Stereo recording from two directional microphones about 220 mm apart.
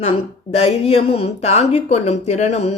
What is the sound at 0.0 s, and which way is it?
Speech, 30° left (ahead or behind).